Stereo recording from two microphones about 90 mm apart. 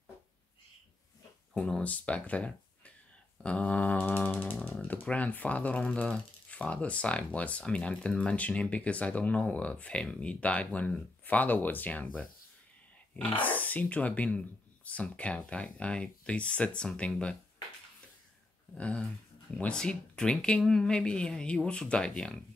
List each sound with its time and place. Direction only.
1.5 s speech: 5° left (ahead or behind)
3.4 s a sound: 15° left (ahead or behind)
4.7 s typing: 20° left (ahead or behind)
5.0 s speech: 15° left (ahead or behind)
13.4 s speech: 20° left (ahead or behind)
18.8 s speech: 15° left (ahead or behind)